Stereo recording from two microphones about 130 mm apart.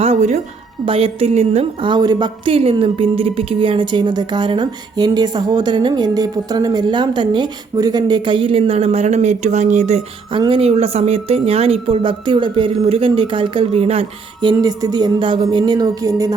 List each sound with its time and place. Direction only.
0.0 s a sound: 65° right (ahead or behind)
0.9 s a woman's voice: 45° right (ahead or behind)
1.8 s speech: 35° right (ahead or behind); by 10.0 s 65° right (ahead or behind)
10.3 s a woman's voice: 40° right (ahead or behind)
14.4 s speech: 30° right (ahead or behind)